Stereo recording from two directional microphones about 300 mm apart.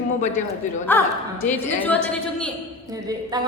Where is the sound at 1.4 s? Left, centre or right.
Centre.